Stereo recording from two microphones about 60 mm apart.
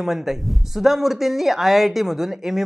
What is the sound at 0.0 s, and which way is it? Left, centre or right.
Speech, centre.